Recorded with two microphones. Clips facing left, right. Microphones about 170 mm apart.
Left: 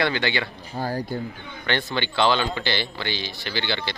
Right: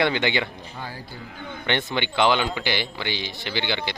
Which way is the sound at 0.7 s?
40° left (ahead or behind).